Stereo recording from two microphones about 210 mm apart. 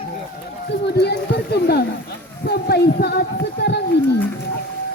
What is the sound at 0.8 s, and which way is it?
Speech, 50° left (ahead or behind).